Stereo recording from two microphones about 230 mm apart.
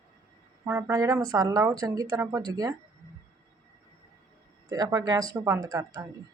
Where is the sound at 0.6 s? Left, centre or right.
Centre.